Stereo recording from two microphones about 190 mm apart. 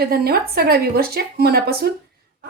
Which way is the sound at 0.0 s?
55° right (ahead or behind).